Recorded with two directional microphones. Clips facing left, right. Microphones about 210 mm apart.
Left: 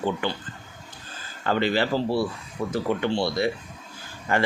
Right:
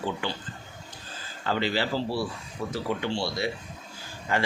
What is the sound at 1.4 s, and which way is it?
Speech, 55° left (ahead or behind).